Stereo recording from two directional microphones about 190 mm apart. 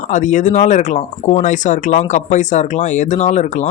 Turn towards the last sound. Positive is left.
turn(degrees=40)  # may be behind; listen again after turning